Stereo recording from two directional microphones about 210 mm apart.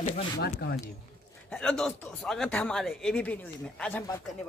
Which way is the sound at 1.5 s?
5° left (ahead or behind).